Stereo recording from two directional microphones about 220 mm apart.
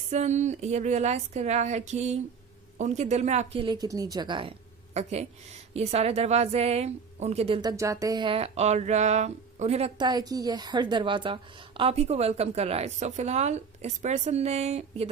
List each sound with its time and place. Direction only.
0.1 s a woman's voice: 30° right (ahead or behind)